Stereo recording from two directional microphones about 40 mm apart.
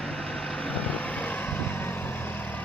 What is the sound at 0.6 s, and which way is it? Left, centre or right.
Vehicle, left.